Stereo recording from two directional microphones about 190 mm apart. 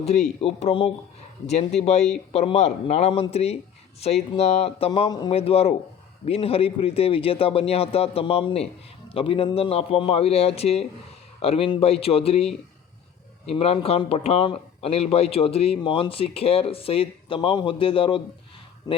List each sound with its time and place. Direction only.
0.4 s speech: 30° left (ahead or behind)
4.9 s speech: 20° left (ahead or behind)